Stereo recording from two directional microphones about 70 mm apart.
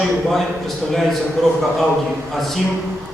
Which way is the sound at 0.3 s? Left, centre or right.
Centre.